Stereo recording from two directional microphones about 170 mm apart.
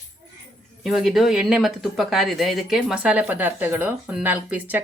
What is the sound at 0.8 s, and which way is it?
Speech, centre (ahead or behind).